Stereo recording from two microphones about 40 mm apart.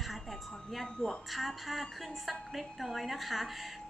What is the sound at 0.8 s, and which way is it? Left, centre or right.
Speech, centre.